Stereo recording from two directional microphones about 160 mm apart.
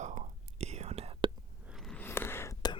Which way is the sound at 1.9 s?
15° left (ahead or behind).